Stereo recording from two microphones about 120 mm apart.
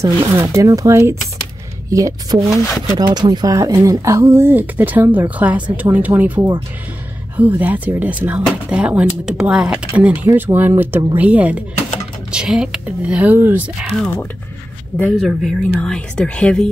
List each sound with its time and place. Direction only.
0.0 s speech: 25° right (ahead or behind)
13.8 s speech: 5° left (ahead or behind)